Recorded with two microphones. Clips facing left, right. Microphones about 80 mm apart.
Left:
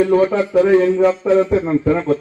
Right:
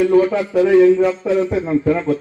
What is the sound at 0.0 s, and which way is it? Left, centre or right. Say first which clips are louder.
A man's voice: even; left.